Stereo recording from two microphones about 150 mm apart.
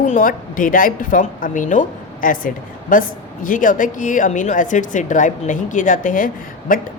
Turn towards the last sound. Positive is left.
turn(degrees=65)  # may be behind; listen again after turning